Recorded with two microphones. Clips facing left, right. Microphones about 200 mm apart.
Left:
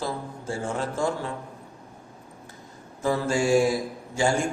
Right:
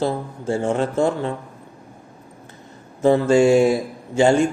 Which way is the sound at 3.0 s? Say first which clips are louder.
Right 10 dB; 25° right (ahead or behind).